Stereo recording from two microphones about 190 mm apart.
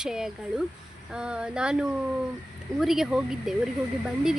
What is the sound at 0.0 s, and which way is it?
Speech, 5° right (ahead or behind).